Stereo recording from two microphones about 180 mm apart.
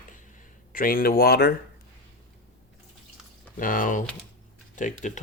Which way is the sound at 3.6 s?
50° left (ahead or behind).